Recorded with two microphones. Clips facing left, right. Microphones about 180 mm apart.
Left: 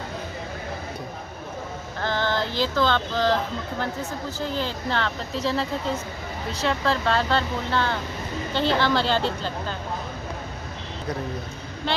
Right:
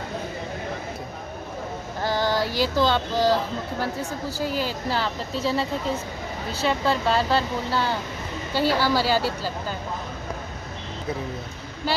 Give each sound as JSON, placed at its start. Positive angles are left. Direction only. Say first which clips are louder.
{"t": 2.0, "sound": "female singing", "louder": "right 2 dB", "side_deg": -10}
{"t": 4.4, "sound": "a woman's voice", "louder": "right 2 dB", "side_deg": -10}